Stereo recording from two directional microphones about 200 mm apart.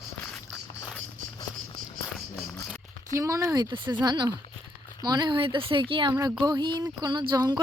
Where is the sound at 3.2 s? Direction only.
15° right (ahead or behind).